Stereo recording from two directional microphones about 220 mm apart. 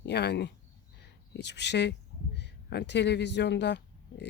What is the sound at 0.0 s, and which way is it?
Speech, 50° left (ahead or behind).